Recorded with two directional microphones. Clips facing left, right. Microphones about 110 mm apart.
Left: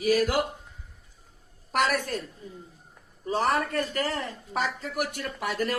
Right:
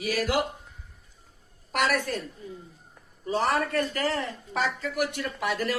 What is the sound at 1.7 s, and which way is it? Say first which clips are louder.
Speech: even; 40° left (ahead or behind).